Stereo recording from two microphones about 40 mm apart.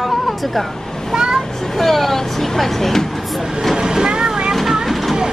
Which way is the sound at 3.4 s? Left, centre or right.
Centre.